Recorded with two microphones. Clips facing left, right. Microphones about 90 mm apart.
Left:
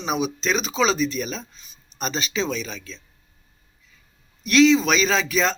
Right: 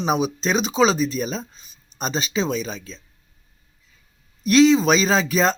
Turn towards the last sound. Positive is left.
turn(degrees=-40)  # may be behind; listen again after turning